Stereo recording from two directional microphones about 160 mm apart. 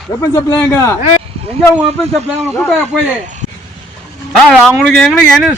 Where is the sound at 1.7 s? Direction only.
5° right (ahead or behind).